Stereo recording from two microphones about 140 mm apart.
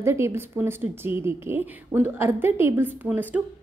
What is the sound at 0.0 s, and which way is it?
A woman's voice, 20° right (ahead or behind).